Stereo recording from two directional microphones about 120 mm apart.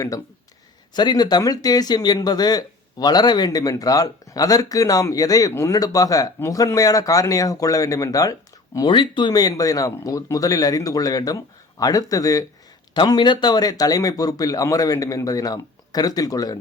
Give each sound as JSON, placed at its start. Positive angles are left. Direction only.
{"t": 0.9, "sound": "speech", "side_deg": 35}
{"t": 8.9, "sound": "speech", "side_deg": 40}